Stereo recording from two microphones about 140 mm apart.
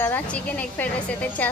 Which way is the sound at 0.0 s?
10° left (ahead or behind).